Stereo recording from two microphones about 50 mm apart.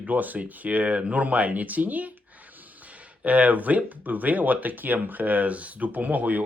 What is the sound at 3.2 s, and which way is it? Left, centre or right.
Speech, right.